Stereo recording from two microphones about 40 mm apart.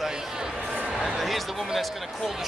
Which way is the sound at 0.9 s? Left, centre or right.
Centre.